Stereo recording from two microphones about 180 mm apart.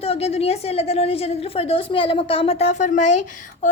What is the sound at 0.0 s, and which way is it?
Child singing, 35° left (ahead or behind).